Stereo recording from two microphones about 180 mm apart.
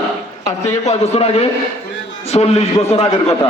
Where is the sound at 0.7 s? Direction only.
40° left (ahead or behind).